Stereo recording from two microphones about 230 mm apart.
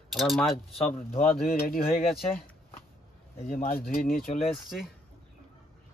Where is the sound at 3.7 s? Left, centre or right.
Left.